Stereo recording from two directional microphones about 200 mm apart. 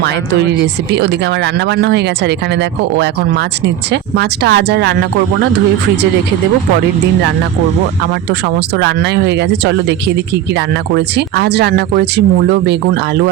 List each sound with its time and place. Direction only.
0.0 s speech: 60° right (ahead or behind)
1.7 s speech: 60° right (ahead or behind)
4.2 s speech: 55° right (ahead or behind)
8.8 s speech: 60° right (ahead or behind)
10.9 s speech: 55° right (ahead or behind)